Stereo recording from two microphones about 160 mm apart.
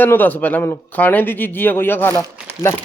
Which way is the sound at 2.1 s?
20° right (ahead or behind).